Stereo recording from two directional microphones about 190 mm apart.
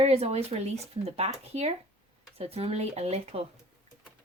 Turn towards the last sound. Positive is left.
turn(degrees=-35)  # may be behind; listen again after turning